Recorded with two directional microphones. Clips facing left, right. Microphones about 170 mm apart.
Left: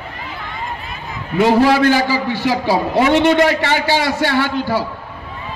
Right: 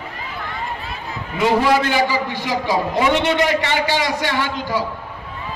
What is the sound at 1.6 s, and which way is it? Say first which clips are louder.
Speech: left 5 dB; 45° left (ahead or behind).